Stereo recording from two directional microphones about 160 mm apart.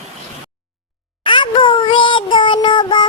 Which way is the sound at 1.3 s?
30° left (ahead or behind).